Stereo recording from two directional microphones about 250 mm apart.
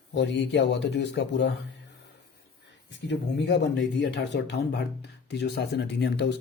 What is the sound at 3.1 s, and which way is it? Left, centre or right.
Speech, left.